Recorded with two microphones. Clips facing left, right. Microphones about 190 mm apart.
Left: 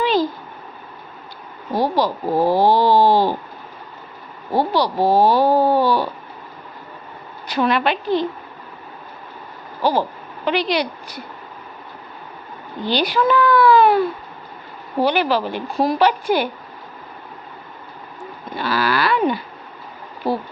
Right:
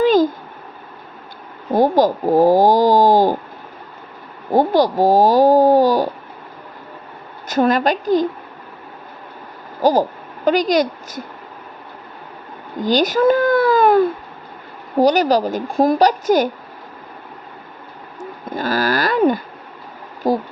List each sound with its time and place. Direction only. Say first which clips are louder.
0.0 s a sound: right 5 dB; 45° right (ahead or behind)
1.7 s speech: right 5 dB; 45° right (ahead or behind)
2.2 s speech: right 5 dB; 15° right (ahead or behind)
2.5 s speech: even; 45° right (ahead or behind)
4.5 s speech: right 4 dB; 45° right (ahead or behind)
7.4 s speech: right 3 dB; 45° right (ahead or behind)
9.8 s speech: right 4 dB; 45° right (ahead or behind)
12.8 s speech: right 4 dB; 45° right (ahead or behind)
15.0 s speech: right 4 dB; 40° right (ahead or behind)
18.5 s a sound: right 2 dB; 45° right (ahead or behind)
20.2 s speech: right 4 dB; 15° right (ahead or behind)